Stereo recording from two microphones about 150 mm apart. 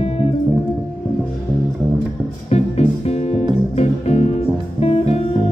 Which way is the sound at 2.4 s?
45° left (ahead or behind).